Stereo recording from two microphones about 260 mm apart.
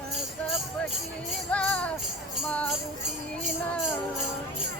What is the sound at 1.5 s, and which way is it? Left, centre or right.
Music, centre.